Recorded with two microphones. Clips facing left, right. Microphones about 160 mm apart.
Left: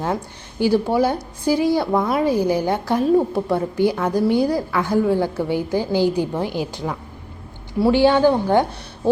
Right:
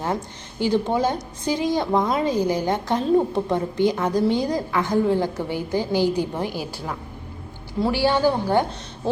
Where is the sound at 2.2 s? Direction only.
10° left (ahead or behind).